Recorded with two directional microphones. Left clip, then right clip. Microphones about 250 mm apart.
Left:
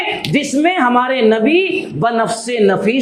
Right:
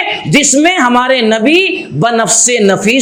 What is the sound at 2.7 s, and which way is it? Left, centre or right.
Speech, right.